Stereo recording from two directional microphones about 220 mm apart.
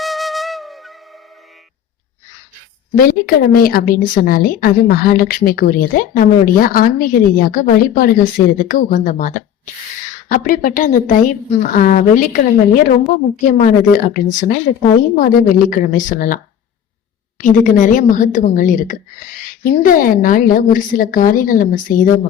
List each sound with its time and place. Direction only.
0.0 s flute: centre (ahead or behind)
2.9 s a woman's voice: 40° left (ahead or behind)